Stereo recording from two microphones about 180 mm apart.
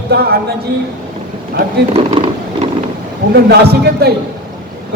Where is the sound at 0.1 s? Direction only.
60° right (ahead or behind).